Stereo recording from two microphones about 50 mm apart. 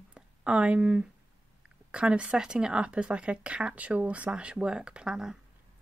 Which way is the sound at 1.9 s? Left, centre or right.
Right.